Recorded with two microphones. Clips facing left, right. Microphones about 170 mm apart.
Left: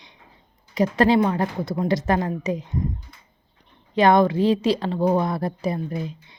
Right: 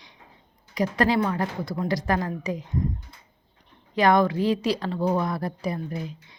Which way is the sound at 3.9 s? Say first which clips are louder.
Left 3 dB; 25° left (ahead or behind).